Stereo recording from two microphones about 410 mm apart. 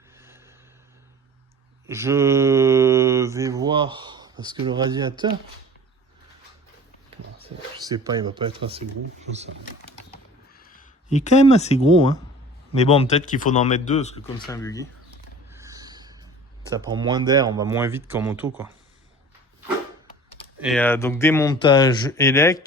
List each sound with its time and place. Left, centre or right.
0.2 s a sound: centre
1.9 s speech: centre
7.4 s speech: centre
10.5 s a man's voice: left
15.4 s a sound: centre
16.9 s speech: centre
20.6 s a man's voice: centre